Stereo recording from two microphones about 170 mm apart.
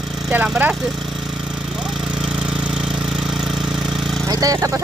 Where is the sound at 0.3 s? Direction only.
10° right (ahead or behind).